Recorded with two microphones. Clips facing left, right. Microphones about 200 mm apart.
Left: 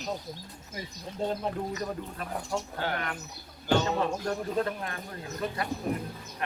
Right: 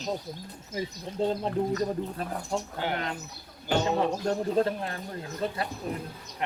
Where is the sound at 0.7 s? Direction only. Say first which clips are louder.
Right 7 dB; 20° right (ahead or behind).